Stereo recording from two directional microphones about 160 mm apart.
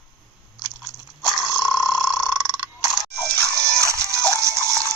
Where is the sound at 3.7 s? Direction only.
20° right (ahead or behind).